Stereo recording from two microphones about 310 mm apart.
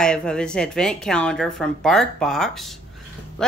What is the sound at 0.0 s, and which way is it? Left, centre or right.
A woman's voice, centre.